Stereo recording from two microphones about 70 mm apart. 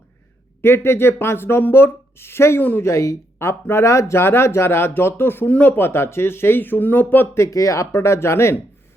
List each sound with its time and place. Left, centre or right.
0.6 s speech: left
2.6 s speech: left
2.8 s speech: left
7.3 s speech: left